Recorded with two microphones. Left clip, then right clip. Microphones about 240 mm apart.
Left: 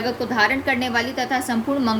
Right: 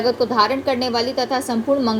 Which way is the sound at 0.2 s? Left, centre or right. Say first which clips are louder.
Right 2 dB; centre.